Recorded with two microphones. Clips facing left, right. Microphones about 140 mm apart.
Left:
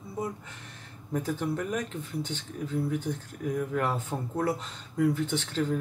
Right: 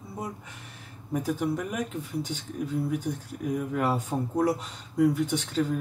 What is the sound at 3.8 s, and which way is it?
Speech, 10° right (ahead or behind).